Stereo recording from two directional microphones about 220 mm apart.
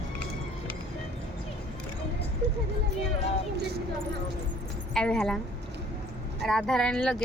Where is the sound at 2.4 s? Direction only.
50° right (ahead or behind).